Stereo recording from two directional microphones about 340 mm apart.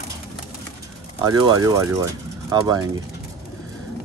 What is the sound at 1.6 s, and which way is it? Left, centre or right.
Speech, centre.